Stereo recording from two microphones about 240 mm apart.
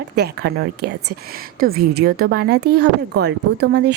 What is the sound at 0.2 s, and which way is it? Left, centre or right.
Speech, right.